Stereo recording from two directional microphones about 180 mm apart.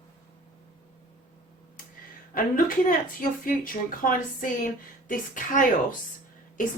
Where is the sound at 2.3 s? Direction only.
50° left (ahead or behind).